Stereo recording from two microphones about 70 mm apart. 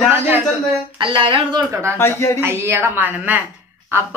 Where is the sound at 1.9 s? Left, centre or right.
Left.